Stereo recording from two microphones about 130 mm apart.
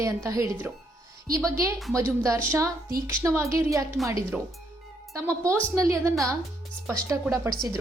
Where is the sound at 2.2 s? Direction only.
25° right (ahead or behind).